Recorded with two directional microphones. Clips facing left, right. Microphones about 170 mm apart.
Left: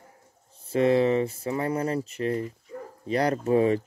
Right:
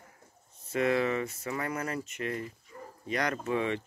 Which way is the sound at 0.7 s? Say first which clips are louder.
Left 7 dB; 30° left (ahead or behind).